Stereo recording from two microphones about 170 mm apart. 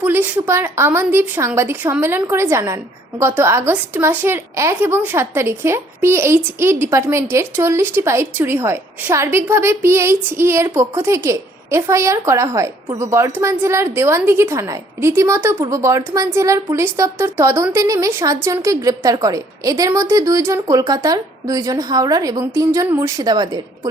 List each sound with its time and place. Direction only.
0.0 s a woman's voice: 10° right (ahead or behind)